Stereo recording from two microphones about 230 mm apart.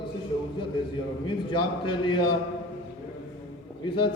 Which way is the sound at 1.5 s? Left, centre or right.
Left.